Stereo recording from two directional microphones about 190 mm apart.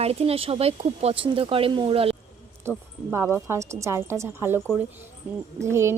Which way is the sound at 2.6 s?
15° right (ahead or behind).